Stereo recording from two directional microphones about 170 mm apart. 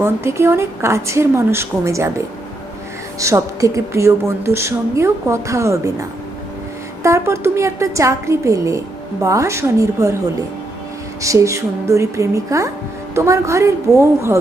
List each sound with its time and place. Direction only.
0.0 s speech: 15° right (ahead or behind)
11.2 s speech: 20° right (ahead or behind)